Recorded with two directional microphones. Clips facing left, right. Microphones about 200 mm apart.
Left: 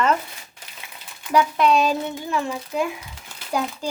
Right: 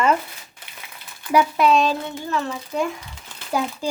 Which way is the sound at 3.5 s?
5° right (ahead or behind).